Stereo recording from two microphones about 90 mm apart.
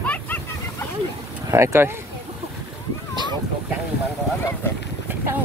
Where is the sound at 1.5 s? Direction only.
30° right (ahead or behind).